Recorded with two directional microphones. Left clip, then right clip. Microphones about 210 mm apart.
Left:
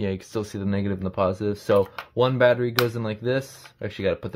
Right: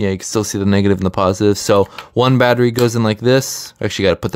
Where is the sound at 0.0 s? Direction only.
35° right (ahead or behind).